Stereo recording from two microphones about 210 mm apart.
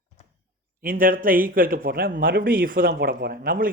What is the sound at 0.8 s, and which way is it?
Speech, 40° right (ahead or behind).